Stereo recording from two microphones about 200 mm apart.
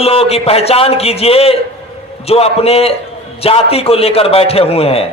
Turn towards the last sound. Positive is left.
turn(degrees=30)  # may be behind; listen again after turning